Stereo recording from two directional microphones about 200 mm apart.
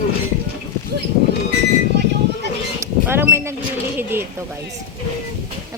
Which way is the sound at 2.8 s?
10° right (ahead or behind).